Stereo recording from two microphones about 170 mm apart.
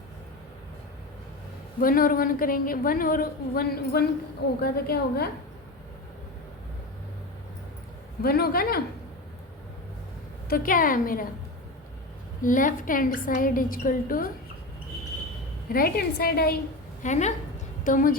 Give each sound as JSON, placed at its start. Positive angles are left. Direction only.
{"t": 1.8, "sound": "a woman's voice", "side_deg": 55}
{"t": 8.2, "sound": "a woman's voice", "side_deg": 65}
{"t": 10.5, "sound": "a woman's voice", "side_deg": 55}
{"t": 12.4, "sound": "a woman's voice", "side_deg": 50}
{"t": 15.7, "sound": "a woman's voice", "side_deg": 60}
{"t": 17.0, "sound": "a woman's voice", "side_deg": 45}